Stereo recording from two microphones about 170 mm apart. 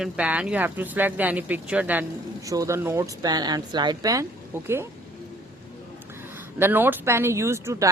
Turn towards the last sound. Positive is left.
turn(degrees=-15)  # may be behind; listen again after turning